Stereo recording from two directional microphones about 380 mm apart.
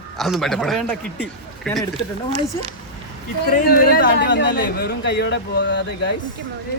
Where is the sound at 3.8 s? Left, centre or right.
Left.